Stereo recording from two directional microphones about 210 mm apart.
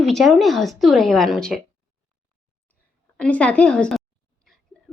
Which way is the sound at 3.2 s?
5° left (ahead or behind).